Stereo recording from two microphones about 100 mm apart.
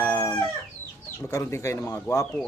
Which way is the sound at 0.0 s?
25° left (ahead or behind).